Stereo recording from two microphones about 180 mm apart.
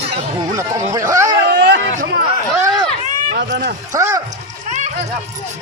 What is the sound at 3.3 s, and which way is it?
Speech, 70° right (ahead or behind).